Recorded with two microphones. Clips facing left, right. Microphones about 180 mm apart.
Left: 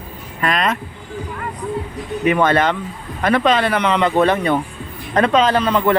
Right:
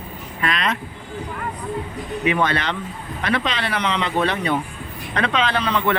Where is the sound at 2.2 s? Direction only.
50° left (ahead or behind).